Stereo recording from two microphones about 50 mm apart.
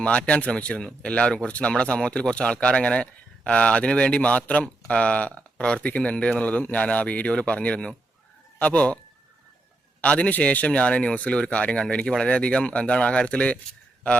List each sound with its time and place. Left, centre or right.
0.0 s a man's voice: left
10.0 s speech: left